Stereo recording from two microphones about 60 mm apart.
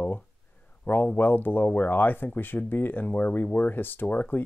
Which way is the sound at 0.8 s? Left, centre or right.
Left.